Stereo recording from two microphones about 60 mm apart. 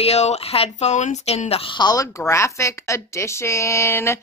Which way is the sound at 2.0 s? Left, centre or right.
Left.